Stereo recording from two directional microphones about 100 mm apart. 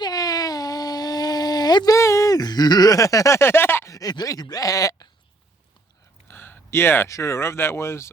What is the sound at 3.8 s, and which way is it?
Speech, 40° left (ahead or behind).